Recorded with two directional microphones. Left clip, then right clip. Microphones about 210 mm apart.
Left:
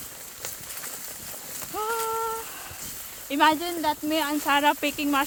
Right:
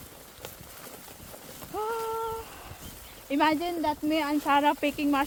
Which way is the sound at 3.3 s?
5° right (ahead or behind).